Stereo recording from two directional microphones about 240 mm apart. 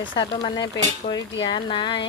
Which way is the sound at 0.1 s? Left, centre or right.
Left.